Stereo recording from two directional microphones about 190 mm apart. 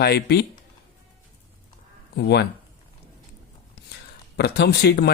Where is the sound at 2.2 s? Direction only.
60° left (ahead or behind).